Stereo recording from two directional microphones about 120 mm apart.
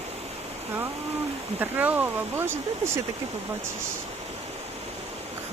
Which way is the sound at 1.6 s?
15° right (ahead or behind).